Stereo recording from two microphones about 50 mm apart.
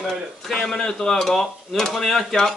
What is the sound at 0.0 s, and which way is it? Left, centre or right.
A man's voice, centre.